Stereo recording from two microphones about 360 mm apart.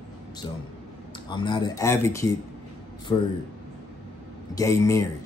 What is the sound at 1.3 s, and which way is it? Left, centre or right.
Speech, centre.